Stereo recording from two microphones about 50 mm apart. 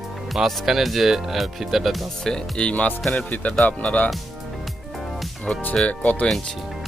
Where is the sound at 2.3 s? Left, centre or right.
Centre.